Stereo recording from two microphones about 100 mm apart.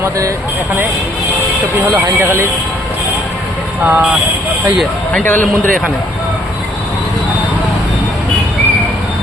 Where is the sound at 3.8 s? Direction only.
15° right (ahead or behind).